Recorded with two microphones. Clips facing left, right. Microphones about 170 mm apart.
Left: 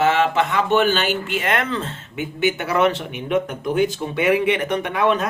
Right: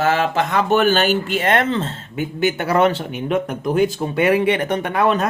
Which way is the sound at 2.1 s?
40° right (ahead or behind).